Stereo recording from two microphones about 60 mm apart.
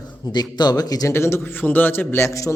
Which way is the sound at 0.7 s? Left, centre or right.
Left.